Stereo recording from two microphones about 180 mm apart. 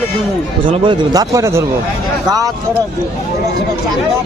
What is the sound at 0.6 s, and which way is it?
A man's voice, 25° right (ahead or behind).